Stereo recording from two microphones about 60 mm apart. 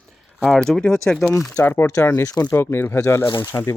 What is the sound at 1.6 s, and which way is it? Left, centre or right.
Speech, left.